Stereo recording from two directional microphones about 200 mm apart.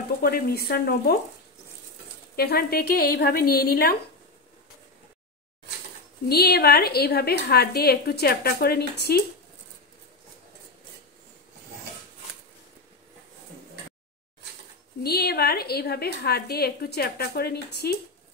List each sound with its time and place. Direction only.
0.2 s a woman's voice: 50° left (ahead or behind)
2.3 s a woman's voice: 50° left (ahead or behind)
6.2 s a woman's voice: 50° left (ahead or behind)
15.0 s a woman's voice: 50° left (ahead or behind)